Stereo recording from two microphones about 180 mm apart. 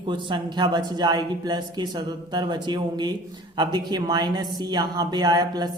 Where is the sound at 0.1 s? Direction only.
25° right (ahead or behind).